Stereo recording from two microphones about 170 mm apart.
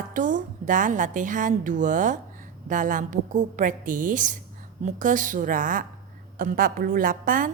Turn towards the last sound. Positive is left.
turn(degrees=-55)  # may be behind; listen again after turning